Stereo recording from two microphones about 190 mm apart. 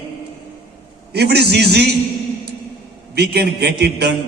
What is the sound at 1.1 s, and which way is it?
Speech, 60° right (ahead or behind).